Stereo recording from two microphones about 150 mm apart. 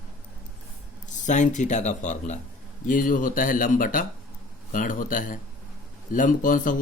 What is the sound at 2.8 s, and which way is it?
A man's voice, 65° left (ahead or behind).